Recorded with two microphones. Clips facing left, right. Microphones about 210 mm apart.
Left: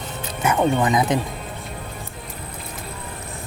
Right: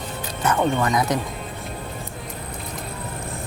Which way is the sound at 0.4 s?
15° left (ahead or behind).